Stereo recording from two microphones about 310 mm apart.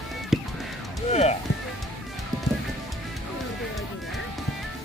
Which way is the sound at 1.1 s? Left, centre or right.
Left.